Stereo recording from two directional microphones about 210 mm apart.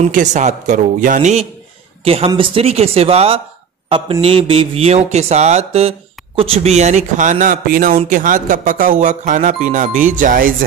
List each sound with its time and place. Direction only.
0.0 s speech: 35° right (ahead or behind)